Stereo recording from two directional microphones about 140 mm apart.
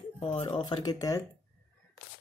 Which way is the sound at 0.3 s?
35° left (ahead or behind).